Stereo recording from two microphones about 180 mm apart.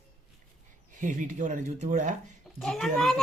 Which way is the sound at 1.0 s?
45° right (ahead or behind).